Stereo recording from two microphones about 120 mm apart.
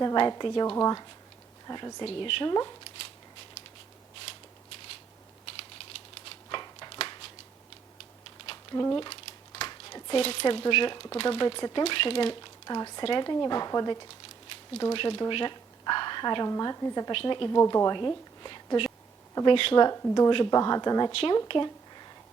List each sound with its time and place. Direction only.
0.0 s a woman's voice: 35° left (ahead or behind)
2.0 s speech: 50° left (ahead or behind)
2.5 s speech: 35° left (ahead or behind)
6.2 s a sound: 40° left (ahead or behind)
8.7 s speech: 30° left (ahead or behind)
9.0 s speech: 45° left (ahead or behind)
12.3 s speech: 35° left (ahead or behind)
14.9 s a woman's voice: 45° left (ahead or behind); by 17.1 s 30° left (ahead or behind)
17.1 s speech: 45° left (ahead or behind)
17.6 s speech: 30° left (ahead or behind); by 19.8 s 45° left (ahead or behind)
19.8 s speech: 30° left (ahead or behind)
21.1 s speech: 50° left (ahead or behind)